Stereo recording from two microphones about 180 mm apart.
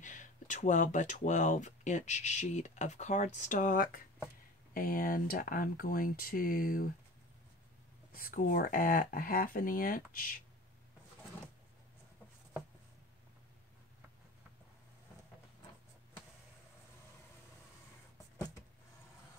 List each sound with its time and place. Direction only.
0.0 s speech: 45° left (ahead or behind)
8.1 s speech: 50° left (ahead or behind)